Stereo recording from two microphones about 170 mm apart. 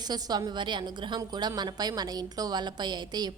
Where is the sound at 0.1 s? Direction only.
25° right (ahead or behind).